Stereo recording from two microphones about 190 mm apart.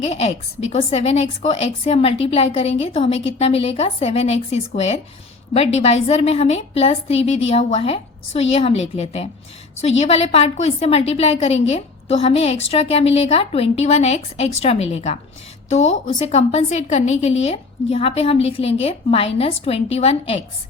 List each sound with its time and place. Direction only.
0.1 s a woman's voice: 35° left (ahead or behind)